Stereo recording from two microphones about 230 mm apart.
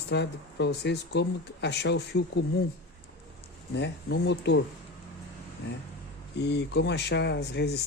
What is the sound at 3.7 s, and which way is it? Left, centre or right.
Speech, left.